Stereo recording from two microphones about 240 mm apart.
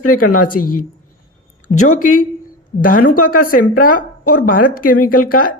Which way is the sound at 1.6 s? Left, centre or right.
Left.